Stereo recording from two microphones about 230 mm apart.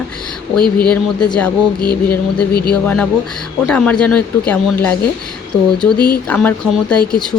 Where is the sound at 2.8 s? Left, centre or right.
Centre.